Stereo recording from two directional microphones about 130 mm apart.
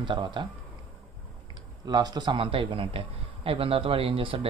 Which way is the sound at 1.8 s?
35° right (ahead or behind).